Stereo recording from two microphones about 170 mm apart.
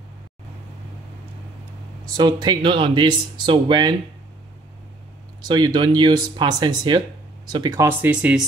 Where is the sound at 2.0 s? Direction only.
25° right (ahead or behind).